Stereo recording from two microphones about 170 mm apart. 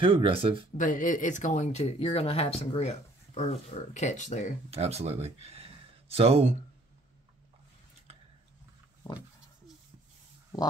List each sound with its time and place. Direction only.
0.0 s speech: 30° right (ahead or behind)
0.7 s speech: 50° left (ahead or behind)
4.6 s speech: 40° right (ahead or behind)